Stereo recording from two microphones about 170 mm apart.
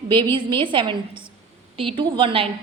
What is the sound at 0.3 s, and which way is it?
A woman's voice, 30° right (ahead or behind).